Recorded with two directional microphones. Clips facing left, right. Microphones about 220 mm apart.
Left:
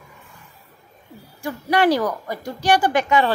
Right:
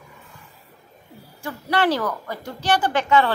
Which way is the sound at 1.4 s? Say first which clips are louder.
Left 3 dB; 15° left (ahead or behind).